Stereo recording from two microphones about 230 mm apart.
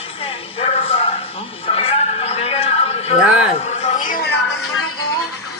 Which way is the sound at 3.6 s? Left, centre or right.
Left.